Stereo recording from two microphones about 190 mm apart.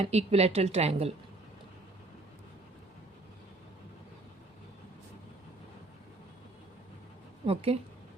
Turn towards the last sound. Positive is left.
turn(degrees=-30)  # may be behind; listen again after turning